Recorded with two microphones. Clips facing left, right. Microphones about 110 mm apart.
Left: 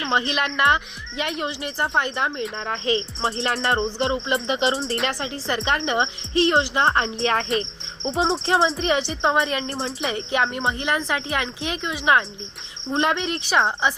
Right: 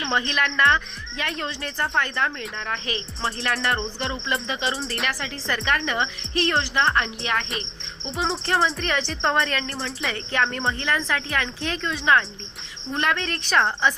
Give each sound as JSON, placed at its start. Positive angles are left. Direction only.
{"t": 0.1, "sound": "speech", "side_deg": 20}